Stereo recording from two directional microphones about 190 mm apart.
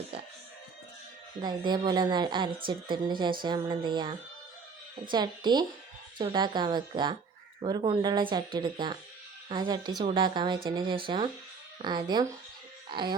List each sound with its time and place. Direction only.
1.4 s a woman's voice: 25° right (ahead or behind)